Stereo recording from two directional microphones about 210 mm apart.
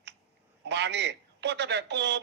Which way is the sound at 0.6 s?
55° right (ahead or behind).